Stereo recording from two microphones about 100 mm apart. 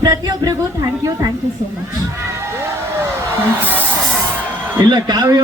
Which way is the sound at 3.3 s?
20° right (ahead or behind).